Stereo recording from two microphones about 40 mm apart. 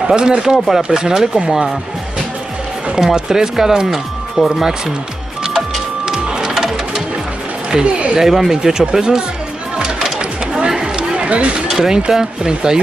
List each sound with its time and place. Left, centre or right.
0.0 s speech: centre
3.0 s speech: centre
6.0 s music: centre
7.7 s speech: right
8.2 s speech: centre
9.8 s a sound: centre
10.7 s a sound: right
11.7 s speech: centre